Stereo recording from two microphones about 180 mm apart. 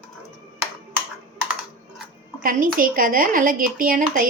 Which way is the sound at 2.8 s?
50° right (ahead or behind).